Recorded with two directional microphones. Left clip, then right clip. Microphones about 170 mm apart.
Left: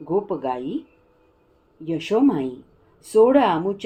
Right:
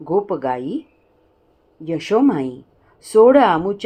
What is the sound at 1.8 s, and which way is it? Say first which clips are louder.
Speech: right 3 dB; 30° right (ahead or behind).